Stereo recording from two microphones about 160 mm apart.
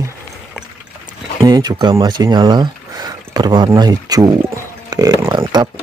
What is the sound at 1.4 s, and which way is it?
Speech, 25° right (ahead or behind).